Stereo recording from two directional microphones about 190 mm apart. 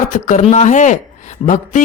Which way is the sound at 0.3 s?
35° left (ahead or behind).